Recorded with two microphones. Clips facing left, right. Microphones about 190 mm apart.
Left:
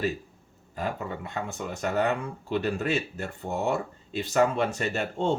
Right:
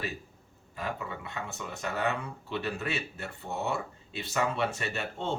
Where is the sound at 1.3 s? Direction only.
45° left (ahead or behind).